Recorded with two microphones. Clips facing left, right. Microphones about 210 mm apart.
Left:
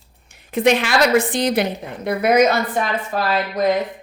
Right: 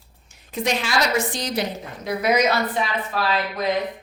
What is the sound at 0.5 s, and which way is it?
Speech, 60° left (ahead or behind).